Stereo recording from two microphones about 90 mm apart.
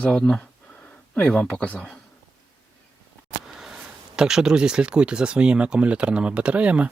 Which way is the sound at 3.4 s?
5° right (ahead or behind).